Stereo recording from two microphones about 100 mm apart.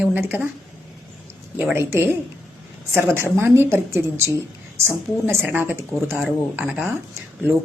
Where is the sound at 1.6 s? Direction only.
20° right (ahead or behind).